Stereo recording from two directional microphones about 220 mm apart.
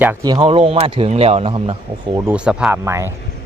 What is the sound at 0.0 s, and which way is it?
Speech, 10° right (ahead or behind).